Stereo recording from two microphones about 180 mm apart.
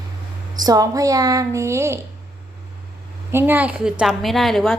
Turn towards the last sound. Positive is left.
turn(degrees=0)  # may be behind; listen again after turning